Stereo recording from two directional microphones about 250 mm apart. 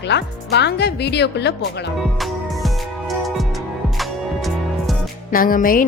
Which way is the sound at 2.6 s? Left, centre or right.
Centre.